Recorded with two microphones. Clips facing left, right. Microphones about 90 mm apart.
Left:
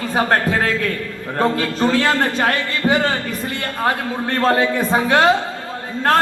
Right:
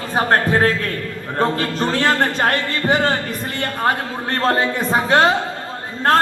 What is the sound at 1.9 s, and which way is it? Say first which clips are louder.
A man's voice: even; 35° right (ahead or behind).